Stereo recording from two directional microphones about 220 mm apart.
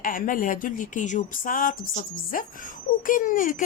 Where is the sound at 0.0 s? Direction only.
40° left (ahead or behind).